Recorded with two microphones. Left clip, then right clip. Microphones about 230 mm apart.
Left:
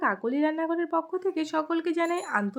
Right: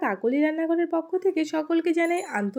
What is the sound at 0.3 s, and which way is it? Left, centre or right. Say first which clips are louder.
A woman's voice: right 3 dB; centre.